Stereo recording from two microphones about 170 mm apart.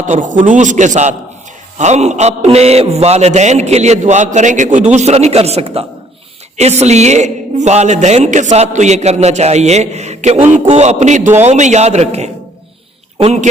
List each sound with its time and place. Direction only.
0.0 s a man's voice: 45° right (ahead or behind)